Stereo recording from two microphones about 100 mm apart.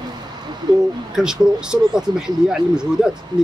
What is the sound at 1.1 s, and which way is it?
Speech, 5° right (ahead or behind).